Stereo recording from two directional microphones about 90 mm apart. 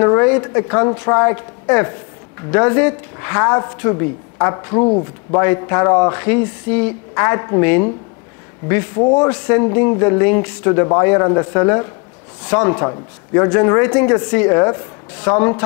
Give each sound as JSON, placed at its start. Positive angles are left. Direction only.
{"t": 0.0, "sound": "speech", "side_deg": 20}